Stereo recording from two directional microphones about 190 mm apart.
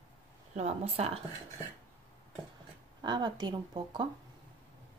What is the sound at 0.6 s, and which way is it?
Speech, 35° right (ahead or behind).